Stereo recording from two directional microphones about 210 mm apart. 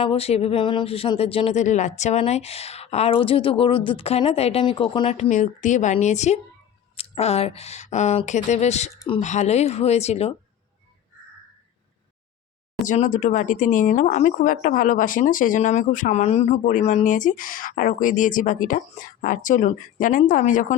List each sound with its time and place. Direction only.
0.0 s speech: 30° left (ahead or behind)
12.9 s speech: 35° left (ahead or behind)